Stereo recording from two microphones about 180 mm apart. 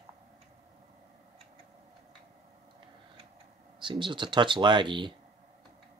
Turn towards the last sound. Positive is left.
turn(degrees=-25)  # may be behind; listen again after turning